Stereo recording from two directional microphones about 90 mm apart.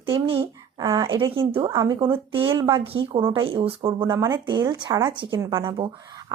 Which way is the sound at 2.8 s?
90° right.